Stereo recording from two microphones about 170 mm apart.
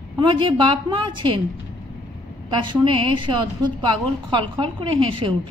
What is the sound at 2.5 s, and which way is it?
Speech, 30° right (ahead or behind).